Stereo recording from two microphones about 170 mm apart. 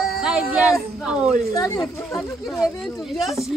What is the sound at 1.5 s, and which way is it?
Speech, 20° left (ahead or behind).